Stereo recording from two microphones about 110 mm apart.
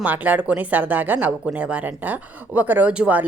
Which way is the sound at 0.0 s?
15° right (ahead or behind).